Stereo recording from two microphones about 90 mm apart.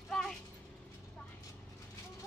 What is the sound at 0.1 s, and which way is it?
Mechanisms, 5° left (ahead or behind).